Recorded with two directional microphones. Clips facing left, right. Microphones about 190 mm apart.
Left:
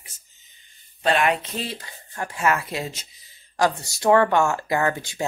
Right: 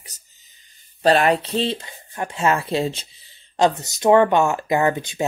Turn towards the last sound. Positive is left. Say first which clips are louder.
# right 4 dB
turn(degrees=-20)  # may be behind; listen again after turning